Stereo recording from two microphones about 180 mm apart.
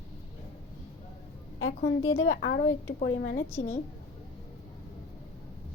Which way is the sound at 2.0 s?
90° left.